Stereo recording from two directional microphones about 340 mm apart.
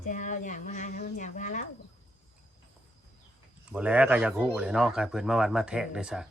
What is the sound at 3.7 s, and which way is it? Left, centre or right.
Speech, centre.